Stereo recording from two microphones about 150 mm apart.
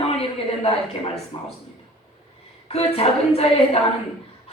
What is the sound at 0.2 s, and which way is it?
A woman's voice, 40° left (ahead or behind).